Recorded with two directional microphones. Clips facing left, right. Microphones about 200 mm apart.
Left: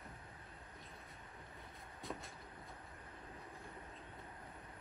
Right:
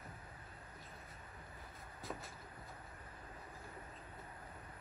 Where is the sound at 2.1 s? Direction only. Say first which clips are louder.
Even; 5° right (ahead or behind).